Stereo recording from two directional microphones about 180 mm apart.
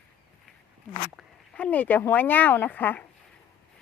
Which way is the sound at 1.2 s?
5° left (ahead or behind).